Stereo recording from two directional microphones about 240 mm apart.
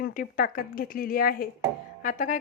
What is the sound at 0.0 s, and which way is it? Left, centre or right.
A woman's voice, left.